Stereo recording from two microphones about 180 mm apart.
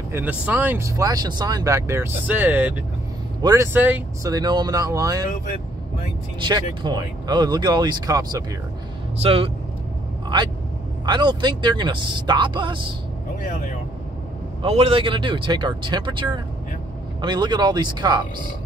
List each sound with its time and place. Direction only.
0.1 s speech: 10° right (ahead or behind)
4.3 s speech: 20° right (ahead or behind)
6.4 s speech: 25° right (ahead or behind)
9.2 s a man's voice: 30° right (ahead or behind)
13.5 s speech: 45° left (ahead or behind)
14.6 s speech: 35° right (ahead or behind)